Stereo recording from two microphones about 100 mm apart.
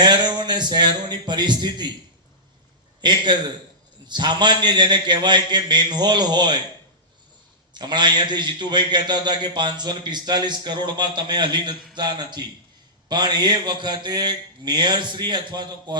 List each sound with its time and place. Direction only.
0.0 s a man's voice: 45° right (ahead or behind)
3.0 s a man's voice: 50° right (ahead or behind)
7.7 s a man's voice: 45° right (ahead or behind)